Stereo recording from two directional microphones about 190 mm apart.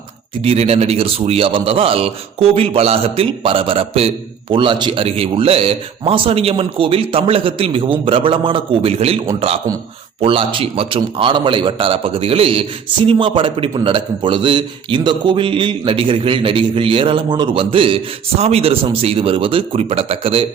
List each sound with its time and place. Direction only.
0.4 s a man's voice: 30° right (ahead or behind)